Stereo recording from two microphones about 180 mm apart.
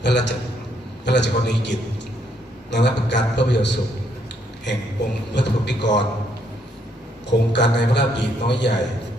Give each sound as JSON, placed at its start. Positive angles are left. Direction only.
{"t": 0.0, "sound": "a man's voice", "side_deg": 75}
{"t": 5.3, "sound": "a man's voice", "side_deg": 75}
{"t": 7.3, "sound": "a man's voice", "side_deg": 75}